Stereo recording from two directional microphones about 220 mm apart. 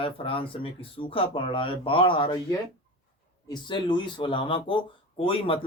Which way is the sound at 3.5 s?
20° left (ahead or behind).